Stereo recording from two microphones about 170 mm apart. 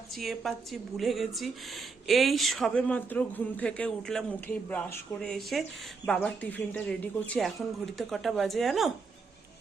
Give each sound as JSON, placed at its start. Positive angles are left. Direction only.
{"t": 0.1, "sound": "speech", "side_deg": 0}